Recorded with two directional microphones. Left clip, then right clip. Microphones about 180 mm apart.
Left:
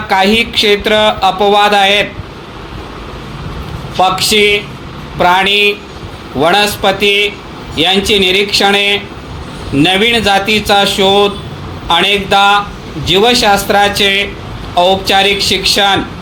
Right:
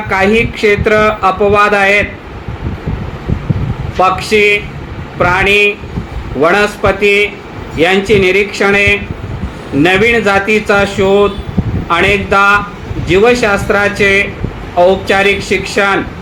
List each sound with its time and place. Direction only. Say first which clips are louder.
0.1 s speech: left 1 dB; 30° left (ahead or behind)
4.0 s a man's voice: even; 35° left (ahead or behind)